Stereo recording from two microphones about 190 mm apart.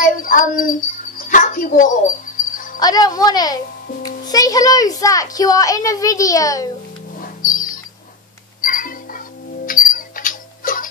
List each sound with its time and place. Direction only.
0.0 s music: 45° left (ahead or behind)
2.8 s speech: 20° left (ahead or behind)
7.2 s music: 45° left (ahead or behind)
9.7 s rodents: 45° left (ahead or behind)